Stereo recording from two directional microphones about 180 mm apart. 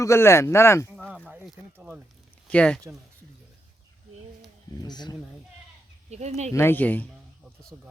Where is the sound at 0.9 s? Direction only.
5° right (ahead or behind).